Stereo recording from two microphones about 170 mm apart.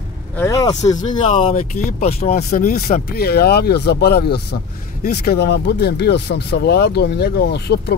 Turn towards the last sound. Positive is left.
turn(degrees=80)